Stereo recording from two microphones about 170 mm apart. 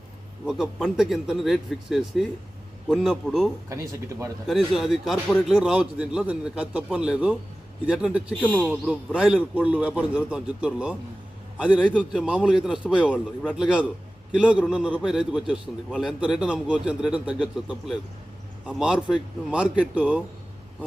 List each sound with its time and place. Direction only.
0.4 s a man's voice: 5° right (ahead or behind)
3.7 s a man's voice: 15° right (ahead or behind)
4.4 s a man's voice: centre (ahead or behind)
8.4 s a man's voice: 10° left (ahead or behind)
8.7 s a man's voice: 5° right (ahead or behind)
11.9 s a man's voice: 5° left (ahead or behind)